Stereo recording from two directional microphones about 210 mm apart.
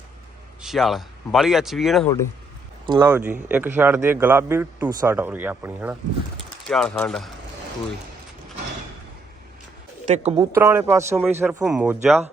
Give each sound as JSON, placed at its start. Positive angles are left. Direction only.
{"t": 0.6, "sound": "speech", "side_deg": 0}
{"t": 2.8, "sound": "speech", "side_deg": -20}
{"t": 3.1, "sound": "a man's voice", "side_deg": -5}
{"t": 6.7, "sound": "speech", "side_deg": 5}
{"t": 10.1, "sound": "speech", "side_deg": -30}
{"t": 10.5, "sound": "a man's voice", "side_deg": -10}